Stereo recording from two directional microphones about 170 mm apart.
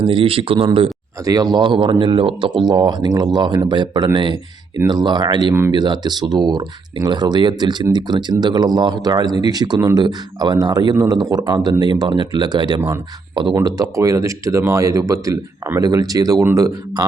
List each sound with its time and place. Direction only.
0.0 s a man's voice: 30° right (ahead or behind)
1.2 s speech: 20° right (ahead or behind)